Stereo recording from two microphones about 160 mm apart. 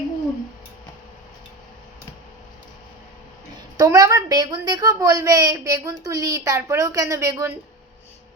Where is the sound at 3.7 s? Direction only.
20° right (ahead or behind).